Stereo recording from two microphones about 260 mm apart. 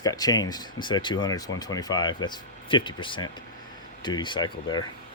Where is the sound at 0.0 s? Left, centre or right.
Centre.